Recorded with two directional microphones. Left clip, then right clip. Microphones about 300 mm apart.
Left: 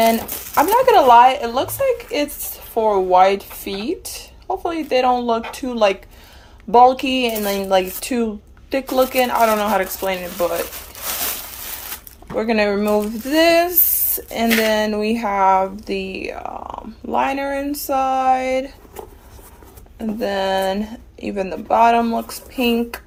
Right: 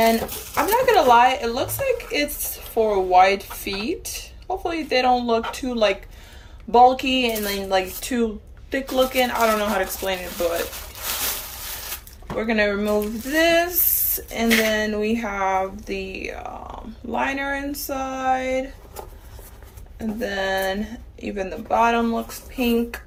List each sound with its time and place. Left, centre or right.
0.0 s speech: left
12.4 s speech: centre
20.0 s speech: centre